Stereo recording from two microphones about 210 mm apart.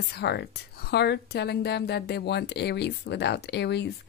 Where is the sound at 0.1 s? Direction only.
50° left (ahead or behind).